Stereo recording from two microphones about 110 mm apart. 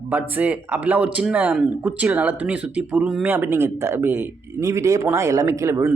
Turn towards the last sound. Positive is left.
turn(degrees=-25)  # may be behind; listen again after turning